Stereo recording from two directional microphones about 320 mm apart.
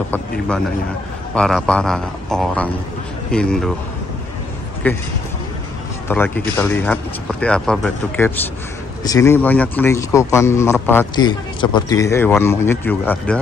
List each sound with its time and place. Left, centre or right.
1.3 s speech: centre
4.8 s speech: centre
6.0 s a man's voice: centre